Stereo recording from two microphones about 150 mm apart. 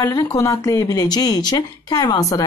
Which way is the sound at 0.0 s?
20° left (ahead or behind).